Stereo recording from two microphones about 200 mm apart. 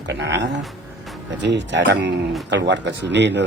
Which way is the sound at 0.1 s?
60° right (ahead or behind).